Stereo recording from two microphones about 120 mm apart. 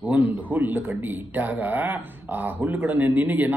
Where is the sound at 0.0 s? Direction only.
15° right (ahead or behind).